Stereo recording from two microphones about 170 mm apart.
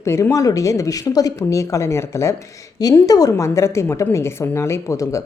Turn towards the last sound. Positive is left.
turn(degrees=20)  # may be behind; listen again after turning